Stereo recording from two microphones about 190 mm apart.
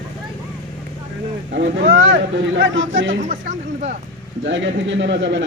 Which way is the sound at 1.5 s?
80° right.